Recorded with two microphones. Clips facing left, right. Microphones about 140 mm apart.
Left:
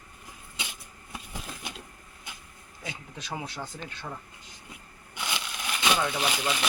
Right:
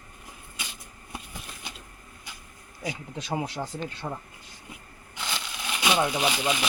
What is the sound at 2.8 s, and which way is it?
Speech, 25° right (ahead or behind).